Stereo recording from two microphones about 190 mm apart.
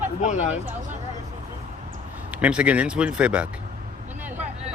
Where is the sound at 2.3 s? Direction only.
5° right (ahead or behind).